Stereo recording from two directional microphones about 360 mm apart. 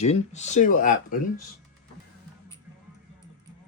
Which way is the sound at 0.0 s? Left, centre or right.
Centre.